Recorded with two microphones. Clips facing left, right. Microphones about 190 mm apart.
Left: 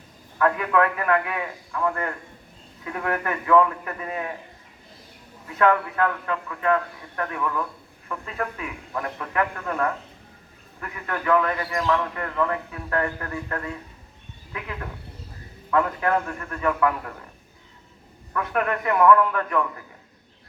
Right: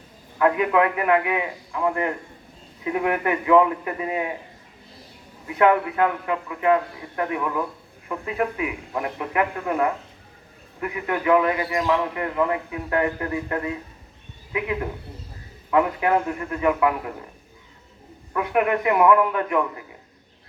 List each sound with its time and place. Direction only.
0.3 s a man's voice: 20° right (ahead or behind)
5.5 s a man's voice: 15° right (ahead or behind)
18.3 s a man's voice: 15° right (ahead or behind)